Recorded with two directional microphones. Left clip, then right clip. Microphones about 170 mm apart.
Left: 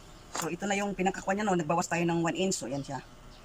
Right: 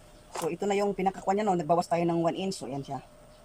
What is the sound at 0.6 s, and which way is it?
Speech, 30° right (ahead or behind).